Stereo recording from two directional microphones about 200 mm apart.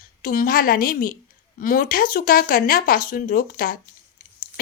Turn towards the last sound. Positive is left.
turn(degrees=45)  # may be behind; listen again after turning